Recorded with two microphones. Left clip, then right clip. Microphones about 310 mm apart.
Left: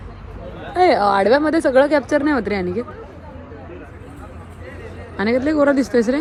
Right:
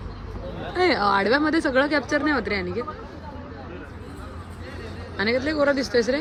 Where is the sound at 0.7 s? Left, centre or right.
Centre.